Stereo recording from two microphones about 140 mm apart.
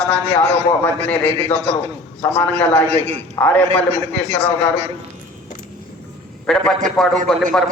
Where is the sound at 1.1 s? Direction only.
15° left (ahead or behind).